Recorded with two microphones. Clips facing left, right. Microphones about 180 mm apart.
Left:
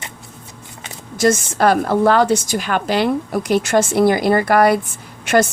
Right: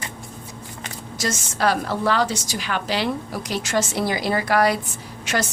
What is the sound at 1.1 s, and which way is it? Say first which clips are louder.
A woman's voice: left 12 dB; 55° left (ahead or behind).